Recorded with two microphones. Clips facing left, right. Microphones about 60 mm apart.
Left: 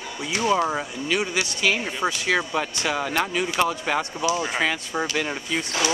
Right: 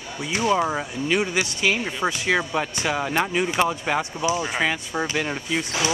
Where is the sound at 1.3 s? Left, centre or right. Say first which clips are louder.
Right 1 dB; right.